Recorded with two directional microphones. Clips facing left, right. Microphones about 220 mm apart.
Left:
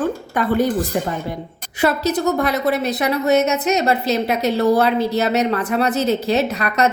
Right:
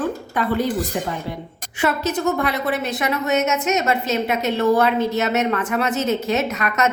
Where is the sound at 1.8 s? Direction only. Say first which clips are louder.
Left 3 dB; 35° left (ahead or behind).